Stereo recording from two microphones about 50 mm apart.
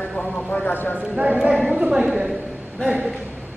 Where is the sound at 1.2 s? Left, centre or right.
Centre.